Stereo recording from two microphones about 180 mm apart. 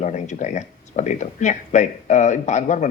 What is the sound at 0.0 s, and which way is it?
Speech, 40° left (ahead or behind).